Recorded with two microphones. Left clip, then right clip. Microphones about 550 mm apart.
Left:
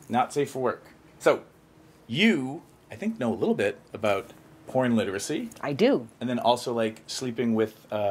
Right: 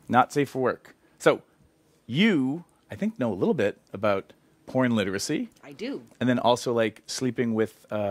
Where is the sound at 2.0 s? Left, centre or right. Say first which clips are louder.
Even; right.